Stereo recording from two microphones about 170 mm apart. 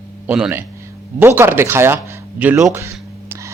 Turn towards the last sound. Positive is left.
turn(degrees=-15)  # may be behind; listen again after turning